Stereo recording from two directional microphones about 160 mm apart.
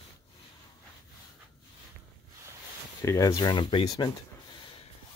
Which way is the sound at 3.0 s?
20° left (ahead or behind).